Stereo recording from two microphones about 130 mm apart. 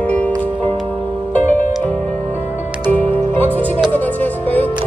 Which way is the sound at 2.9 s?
15° left (ahead or behind).